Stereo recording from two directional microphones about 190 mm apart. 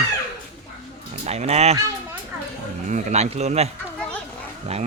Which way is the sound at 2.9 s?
35° right (ahead or behind).